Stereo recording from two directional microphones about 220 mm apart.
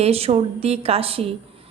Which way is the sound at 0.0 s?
25° right (ahead or behind).